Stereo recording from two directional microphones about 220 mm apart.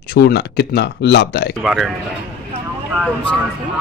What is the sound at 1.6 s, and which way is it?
Speech, centre (ahead or behind).